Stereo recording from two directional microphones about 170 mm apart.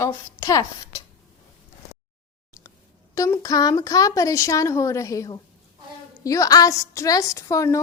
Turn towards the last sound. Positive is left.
turn(degrees=20)  # may be behind; listen again after turning